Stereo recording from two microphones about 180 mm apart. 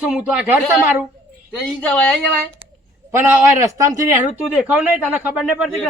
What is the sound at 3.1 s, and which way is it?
Speech, 15° right (ahead or behind).